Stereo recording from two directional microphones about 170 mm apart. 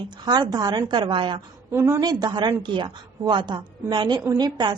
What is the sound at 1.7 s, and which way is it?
A woman's voice, 15° right (ahead or behind).